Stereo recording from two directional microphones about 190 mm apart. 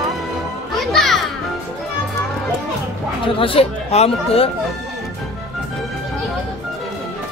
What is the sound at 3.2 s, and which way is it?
Speech, 30° left (ahead or behind).